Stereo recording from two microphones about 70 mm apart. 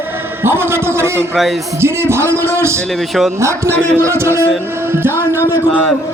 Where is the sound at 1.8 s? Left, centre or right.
Right.